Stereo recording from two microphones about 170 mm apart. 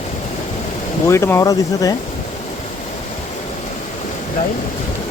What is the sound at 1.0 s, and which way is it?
Speech, 15° left (ahead or behind).